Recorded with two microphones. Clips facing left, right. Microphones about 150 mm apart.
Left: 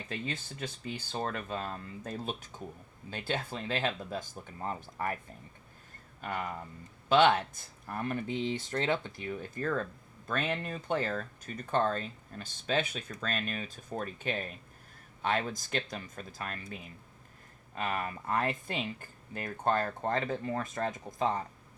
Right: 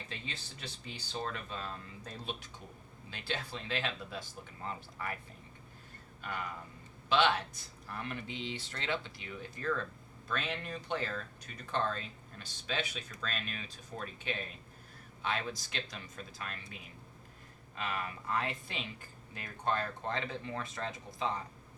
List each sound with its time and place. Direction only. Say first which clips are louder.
0.1 s speech: left 12 dB; 50° left (ahead or behind)
7.1 s speech: left 5 dB; 45° left (ahead or behind)
17.7 s speech: left 4 dB; 45° left (ahead or behind)